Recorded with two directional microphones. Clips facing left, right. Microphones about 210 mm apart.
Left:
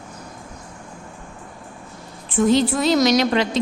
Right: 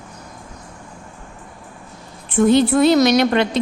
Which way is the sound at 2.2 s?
60° right (ahead or behind).